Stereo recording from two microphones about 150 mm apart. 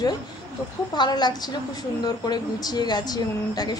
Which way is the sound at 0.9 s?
30° left (ahead or behind).